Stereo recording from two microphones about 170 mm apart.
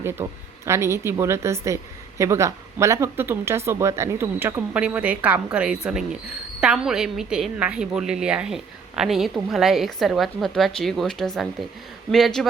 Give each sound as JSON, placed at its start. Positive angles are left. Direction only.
{"t": 0.0, "sound": "a woman's voice", "side_deg": -15}